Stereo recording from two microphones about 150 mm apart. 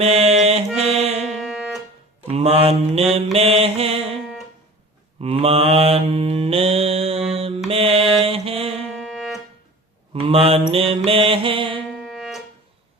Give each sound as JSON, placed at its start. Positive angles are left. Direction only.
{"t": 0.0, "sound": "music", "side_deg": -45}
{"t": 1.2, "sound": "music", "side_deg": 0}
{"t": 2.3, "sound": "mantra", "side_deg": -45}
{"t": 4.2, "sound": "music", "side_deg": 0}
{"t": 5.2, "sound": "mantra", "side_deg": -40}
{"t": 8.9, "sound": "music", "side_deg": 0}
{"t": 10.1, "sound": "mantra", "side_deg": -40}
{"t": 11.9, "sound": "music", "side_deg": 0}